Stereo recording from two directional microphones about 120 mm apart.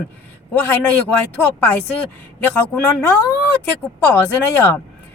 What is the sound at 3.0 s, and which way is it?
Speech, 25° left (ahead or behind).